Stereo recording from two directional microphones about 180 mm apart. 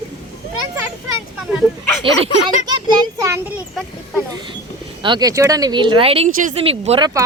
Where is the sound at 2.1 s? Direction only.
30° right (ahead or behind).